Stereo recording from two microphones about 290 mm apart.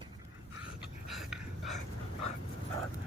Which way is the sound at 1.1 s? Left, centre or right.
Centre.